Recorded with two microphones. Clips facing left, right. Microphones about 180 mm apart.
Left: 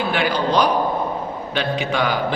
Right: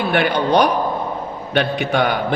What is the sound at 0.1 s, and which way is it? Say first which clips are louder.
Speech: right 5 dB; 60° right (ahead or behind).